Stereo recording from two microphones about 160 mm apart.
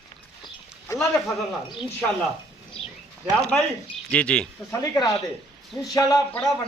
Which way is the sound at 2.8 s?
35° left (ahead or behind).